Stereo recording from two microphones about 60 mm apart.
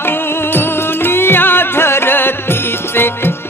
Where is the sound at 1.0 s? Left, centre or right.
Left.